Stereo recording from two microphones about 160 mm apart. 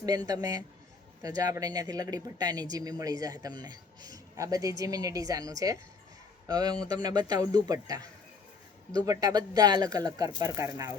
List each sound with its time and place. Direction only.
0.0 s speech: 25° right (ahead or behind)